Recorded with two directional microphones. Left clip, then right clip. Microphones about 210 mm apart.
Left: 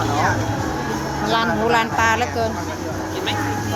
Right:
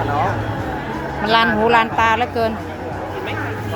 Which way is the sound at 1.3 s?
25° right (ahead or behind).